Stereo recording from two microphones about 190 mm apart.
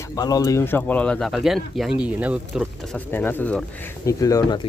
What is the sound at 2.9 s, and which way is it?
Speech, 10° left (ahead or behind).